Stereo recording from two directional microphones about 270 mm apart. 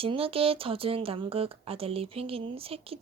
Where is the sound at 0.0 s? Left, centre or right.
Right.